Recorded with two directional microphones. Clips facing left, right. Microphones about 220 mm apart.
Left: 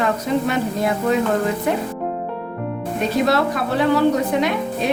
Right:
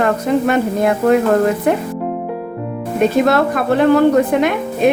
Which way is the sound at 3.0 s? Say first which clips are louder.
Right 5 dB; 55° right (ahead or behind).